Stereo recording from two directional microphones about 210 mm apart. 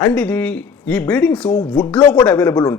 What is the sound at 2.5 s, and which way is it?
Speech, 20° left (ahead or behind).